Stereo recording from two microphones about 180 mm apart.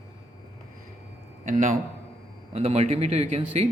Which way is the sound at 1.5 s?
45° right (ahead or behind).